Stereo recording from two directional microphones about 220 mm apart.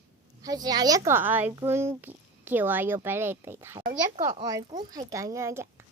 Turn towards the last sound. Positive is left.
turn(degrees=-10)  # may be behind; listen again after turning